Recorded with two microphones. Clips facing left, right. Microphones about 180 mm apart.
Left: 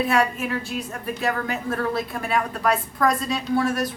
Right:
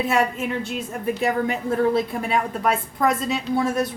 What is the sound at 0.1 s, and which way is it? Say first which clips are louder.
Speech: even; 25° right (ahead or behind).